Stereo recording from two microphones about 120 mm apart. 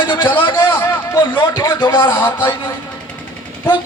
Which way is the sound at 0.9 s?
15° left (ahead or behind).